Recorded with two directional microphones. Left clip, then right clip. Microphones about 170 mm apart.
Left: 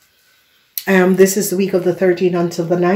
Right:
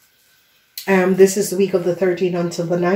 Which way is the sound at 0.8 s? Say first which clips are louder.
Left 2 dB; 55° left (ahead or behind).